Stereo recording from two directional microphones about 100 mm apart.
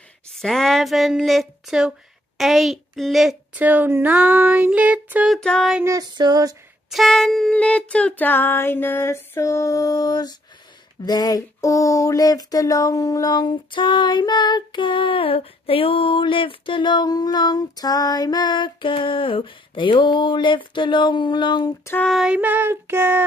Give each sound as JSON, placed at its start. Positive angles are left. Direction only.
{"t": 0.3, "sound": "speech", "side_deg": 5}
{"t": 3.5, "sound": "a sound", "side_deg": -15}
{"t": 5.3, "sound": "speech", "side_deg": 5}
{"t": 6.1, "sound": "a sound", "side_deg": -45}
{"t": 6.9, "sound": "speech", "side_deg": 0}
{"t": 7.5, "sound": "female singing", "side_deg": 10}
{"t": 11.1, "sound": "a sound", "side_deg": 40}
{"t": 22.0, "sound": "speech", "side_deg": 0}
{"t": 22.3, "sound": "child singing", "side_deg": -15}